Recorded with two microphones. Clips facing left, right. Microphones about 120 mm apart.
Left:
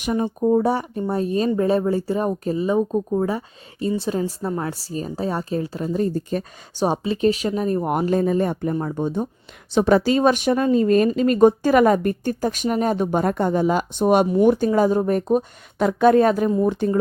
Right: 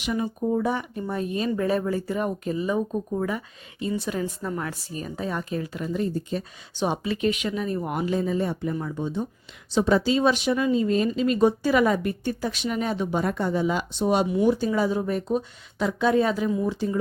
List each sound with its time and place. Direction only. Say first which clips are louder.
0.0 s speech: left 5 dB; 40° left (ahead or behind)